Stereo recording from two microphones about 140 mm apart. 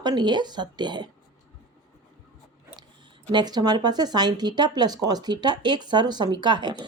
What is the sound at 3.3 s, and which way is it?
Speech, 30° right (ahead or behind).